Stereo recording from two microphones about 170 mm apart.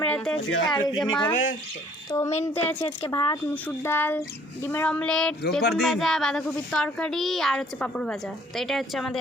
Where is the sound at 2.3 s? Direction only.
40° left (ahead or behind).